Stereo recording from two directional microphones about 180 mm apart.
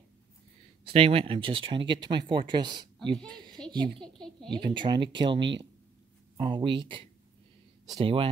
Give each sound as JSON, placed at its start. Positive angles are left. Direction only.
{"t": 0.8, "sound": "a woman's voice", "side_deg": -30}
{"t": 4.0, "sound": "a woman's voice", "side_deg": 5}
{"t": 4.5, "sound": "speech", "side_deg": -25}